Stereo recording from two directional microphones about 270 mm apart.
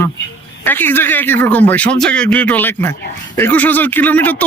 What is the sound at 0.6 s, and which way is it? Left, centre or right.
Speech, centre.